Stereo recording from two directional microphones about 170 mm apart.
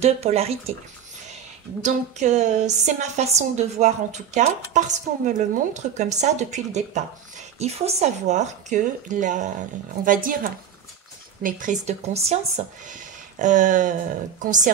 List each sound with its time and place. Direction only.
0.0 s speech: 40° right (ahead or behind)
1.8 s a woman's voice: 45° right (ahead or behind)